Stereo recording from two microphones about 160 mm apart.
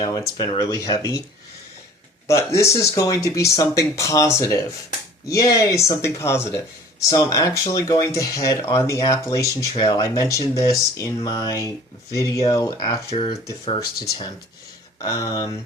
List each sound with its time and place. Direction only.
0.0 s speech: 25° left (ahead or behind)
2.2 s speech: 20° left (ahead or behind)
13.1 s speech: 35° left (ahead or behind)
13.7 s speech: 20° left (ahead or behind)